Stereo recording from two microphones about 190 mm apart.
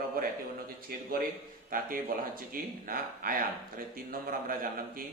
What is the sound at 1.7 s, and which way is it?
Speech, 45° right (ahead or behind).